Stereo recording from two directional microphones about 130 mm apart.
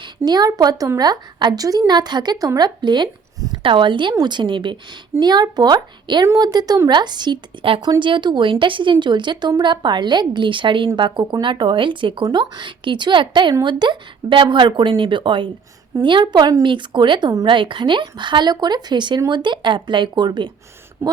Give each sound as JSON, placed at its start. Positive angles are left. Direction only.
{"t": 0.3, "sound": "a woman's voice", "side_deg": -30}
{"t": 21.0, "sound": "a woman's voice", "side_deg": -20}